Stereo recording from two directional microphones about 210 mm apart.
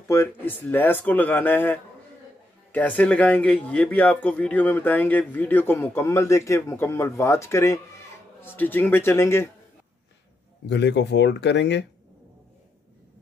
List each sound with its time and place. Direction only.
0.1 s speech: 10° left (ahead or behind)
10.7 s speech: 55° left (ahead or behind)